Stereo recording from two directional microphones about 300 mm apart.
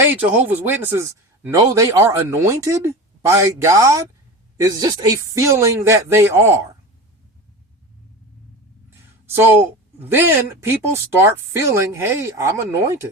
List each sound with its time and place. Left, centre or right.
0.1 s a man's voice: centre
9.2 s a man's voice: centre